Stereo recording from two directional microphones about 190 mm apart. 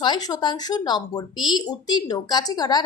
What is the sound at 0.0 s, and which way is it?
A woman's voice, 20° left (ahead or behind).